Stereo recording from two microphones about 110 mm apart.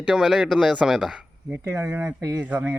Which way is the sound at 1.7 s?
25° right (ahead or behind).